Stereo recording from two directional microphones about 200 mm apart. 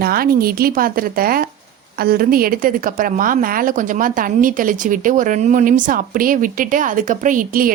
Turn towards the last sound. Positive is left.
turn(degrees=-45)  # may be behind; listen again after turning